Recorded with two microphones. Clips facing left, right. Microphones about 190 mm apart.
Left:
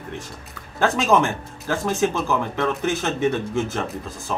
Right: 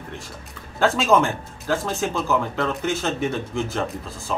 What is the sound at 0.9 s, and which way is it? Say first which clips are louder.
Speech: left 1 dB; 15° left (ahead or behind).